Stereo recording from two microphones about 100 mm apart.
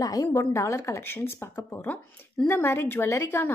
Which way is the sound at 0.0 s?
35° left (ahead or behind).